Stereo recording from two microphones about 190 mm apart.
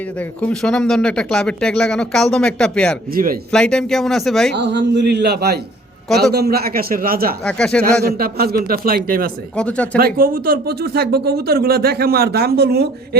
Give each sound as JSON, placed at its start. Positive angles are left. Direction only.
{"t": 0.2, "sound": "speech", "side_deg": 10}
{"t": 3.1, "sound": "a man's voice", "side_deg": -50}
{"t": 3.5, "sound": "speech", "side_deg": 5}
{"t": 4.5, "sound": "a man's voice", "side_deg": -65}
{"t": 7.4, "sound": "speech", "side_deg": 5}
{"t": 8.1, "sound": "a man's voice", "side_deg": -55}
{"t": 9.6, "sound": "speech", "side_deg": 5}
{"t": 10.0, "sound": "speech", "side_deg": -50}